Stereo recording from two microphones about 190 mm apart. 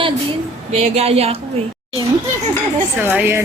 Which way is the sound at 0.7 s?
35° right (ahead or behind).